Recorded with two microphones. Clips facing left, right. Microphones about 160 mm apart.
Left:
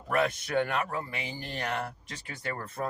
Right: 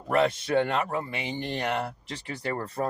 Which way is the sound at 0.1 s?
25° right (ahead or behind).